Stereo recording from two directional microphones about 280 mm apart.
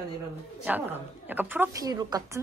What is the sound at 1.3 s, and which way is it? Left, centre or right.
Speech, centre.